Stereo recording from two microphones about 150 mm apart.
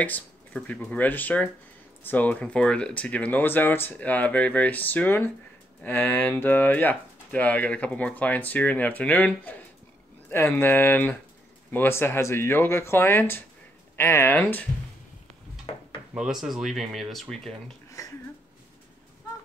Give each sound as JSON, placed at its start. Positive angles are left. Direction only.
{"t": 0.0, "sound": "speech", "side_deg": 10}
{"t": 16.2, "sound": "speech", "side_deg": -5}
{"t": 18.0, "sound": "speech", "side_deg": 20}